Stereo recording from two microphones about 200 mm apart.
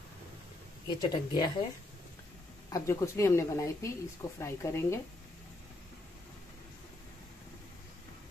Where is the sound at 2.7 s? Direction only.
15° left (ahead or behind).